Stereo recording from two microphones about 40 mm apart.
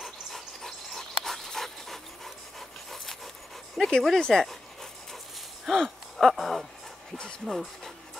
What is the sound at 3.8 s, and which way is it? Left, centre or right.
Speech, centre.